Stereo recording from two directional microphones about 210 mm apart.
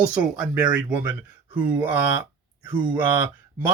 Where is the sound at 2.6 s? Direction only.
10° right (ahead or behind).